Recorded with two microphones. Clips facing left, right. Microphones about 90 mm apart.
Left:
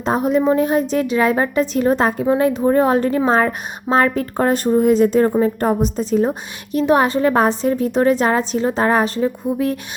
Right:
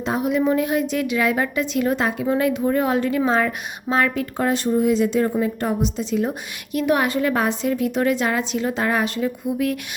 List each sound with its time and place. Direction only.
0.0 s a woman's voice: 40° left (ahead or behind)